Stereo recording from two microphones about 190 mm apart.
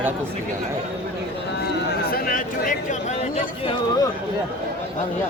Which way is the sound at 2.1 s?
50° left (ahead or behind).